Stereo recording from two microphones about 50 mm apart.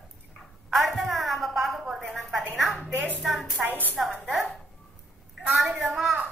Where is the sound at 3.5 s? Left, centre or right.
Right.